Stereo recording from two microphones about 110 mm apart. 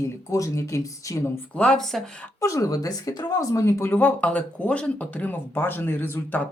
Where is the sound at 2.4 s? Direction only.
30° left (ahead or behind).